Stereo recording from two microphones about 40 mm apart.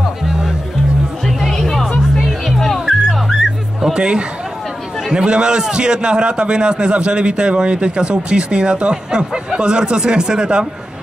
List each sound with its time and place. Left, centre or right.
1.2 s music: centre
2.1 s music: centre
3.1 s dog: centre
3.8 s a man's voice: right